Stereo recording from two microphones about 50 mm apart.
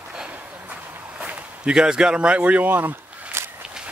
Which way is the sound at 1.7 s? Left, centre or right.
Centre.